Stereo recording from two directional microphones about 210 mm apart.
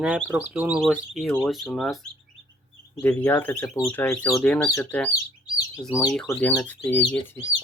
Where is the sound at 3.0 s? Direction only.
10° left (ahead or behind).